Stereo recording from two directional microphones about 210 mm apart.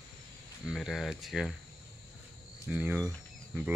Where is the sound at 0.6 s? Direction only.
Centre (ahead or behind).